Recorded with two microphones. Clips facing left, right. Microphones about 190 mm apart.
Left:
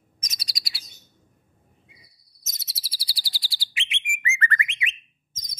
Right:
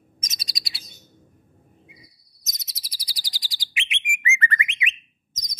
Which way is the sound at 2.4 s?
15° right (ahead or behind).